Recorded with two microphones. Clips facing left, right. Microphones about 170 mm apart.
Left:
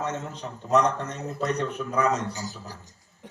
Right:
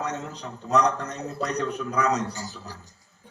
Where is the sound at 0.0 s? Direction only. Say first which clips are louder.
Even; 35° right (ahead or behind).